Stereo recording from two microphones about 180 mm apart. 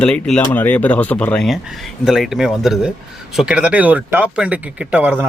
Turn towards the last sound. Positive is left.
turn(degrees=-5)  # may be behind; listen again after turning